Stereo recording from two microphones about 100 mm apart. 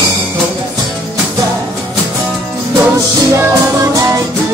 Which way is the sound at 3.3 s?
30° right (ahead or behind).